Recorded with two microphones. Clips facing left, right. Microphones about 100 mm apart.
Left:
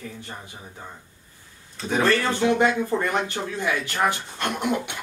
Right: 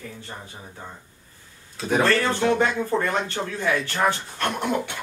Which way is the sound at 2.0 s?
15° left (ahead or behind).